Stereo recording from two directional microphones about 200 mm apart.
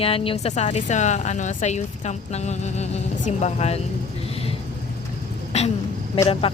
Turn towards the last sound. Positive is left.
turn(degrees=30)  # may be behind; listen again after turning